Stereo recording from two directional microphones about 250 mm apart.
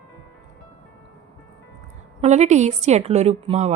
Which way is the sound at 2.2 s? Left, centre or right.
Right.